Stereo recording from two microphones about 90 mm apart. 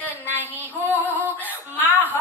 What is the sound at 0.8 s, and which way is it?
Female singing, 20° left (ahead or behind).